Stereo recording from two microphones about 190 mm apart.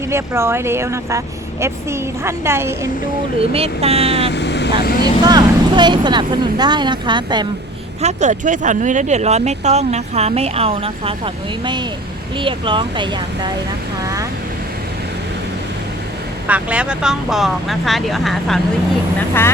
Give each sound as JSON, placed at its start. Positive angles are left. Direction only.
{"t": 0.1, "sound": "speech", "side_deg": -15}
{"t": 3.5, "sound": "speech", "side_deg": -30}
{"t": 4.3, "sound": "speech", "side_deg": 65}
{"t": 5.2, "sound": "speech", "side_deg": -20}
{"t": 8.0, "sound": "speech", "side_deg": -40}
{"t": 12.4, "sound": "speech", "side_deg": -25}
{"t": 16.5, "sound": "speech", "side_deg": -5}